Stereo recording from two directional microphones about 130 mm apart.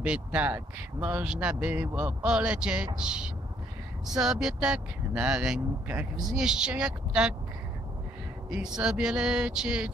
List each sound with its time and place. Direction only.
0.0 s speech: 10° right (ahead or behind)
8.5 s speech: 5° right (ahead or behind)